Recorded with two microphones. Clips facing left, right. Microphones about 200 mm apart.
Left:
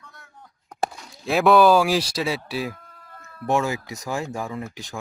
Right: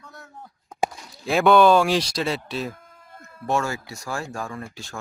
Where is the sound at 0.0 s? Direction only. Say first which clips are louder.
Right 6 dB; 40° right (ahead or behind).